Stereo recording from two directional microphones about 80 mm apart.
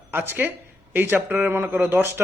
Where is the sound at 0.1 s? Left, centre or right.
Right.